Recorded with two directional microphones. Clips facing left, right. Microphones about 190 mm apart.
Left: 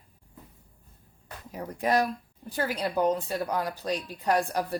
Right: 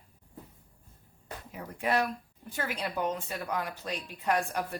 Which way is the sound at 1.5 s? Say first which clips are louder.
Left 4 dB; 40° left (ahead or behind).